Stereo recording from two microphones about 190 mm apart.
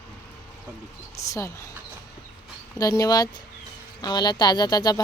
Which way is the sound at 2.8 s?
20° left (ahead or behind).